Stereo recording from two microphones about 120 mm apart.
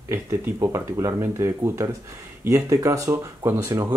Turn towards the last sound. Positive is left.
turn(degrees=-20)  # may be behind; listen again after turning